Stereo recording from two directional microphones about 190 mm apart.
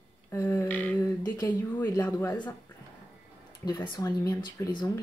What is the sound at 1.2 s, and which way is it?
Speech, 20° left (ahead or behind).